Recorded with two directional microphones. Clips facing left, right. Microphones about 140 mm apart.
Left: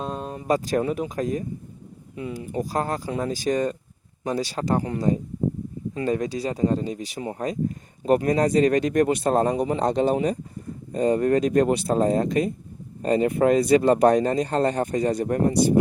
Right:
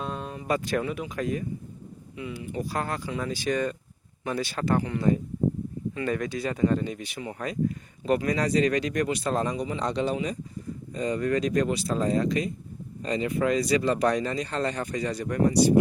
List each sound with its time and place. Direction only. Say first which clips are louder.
0.0 s speech: left 3 dB; 40° left (ahead or behind)